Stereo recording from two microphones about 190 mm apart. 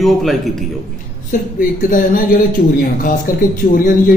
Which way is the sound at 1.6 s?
45° left (ahead or behind).